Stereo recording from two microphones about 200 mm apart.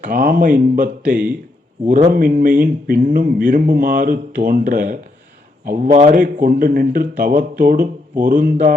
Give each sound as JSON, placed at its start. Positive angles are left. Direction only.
{"t": 0.1, "sound": "speech", "side_deg": -45}